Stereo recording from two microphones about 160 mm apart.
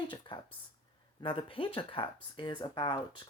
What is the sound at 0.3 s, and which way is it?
Speech, 30° left (ahead or behind).